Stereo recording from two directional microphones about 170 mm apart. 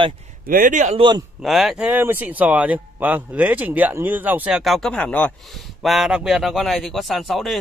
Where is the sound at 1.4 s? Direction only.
Centre (ahead or behind).